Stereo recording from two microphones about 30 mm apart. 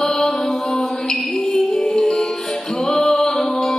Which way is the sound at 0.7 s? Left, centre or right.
Centre.